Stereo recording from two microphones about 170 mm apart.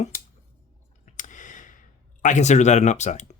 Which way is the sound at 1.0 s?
45° left (ahead or behind).